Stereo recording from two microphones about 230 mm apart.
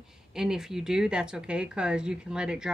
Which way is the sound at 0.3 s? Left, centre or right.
Centre.